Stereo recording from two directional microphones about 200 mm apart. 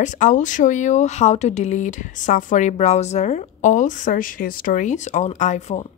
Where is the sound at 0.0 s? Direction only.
40° left (ahead or behind).